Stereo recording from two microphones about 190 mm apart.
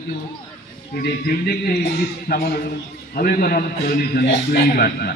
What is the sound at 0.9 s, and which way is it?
A man's voice, 50° left (ahead or behind).